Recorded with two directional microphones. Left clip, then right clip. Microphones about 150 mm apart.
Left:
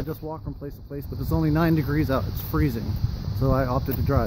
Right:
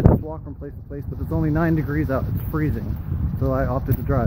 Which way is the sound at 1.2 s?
15° left (ahead or behind).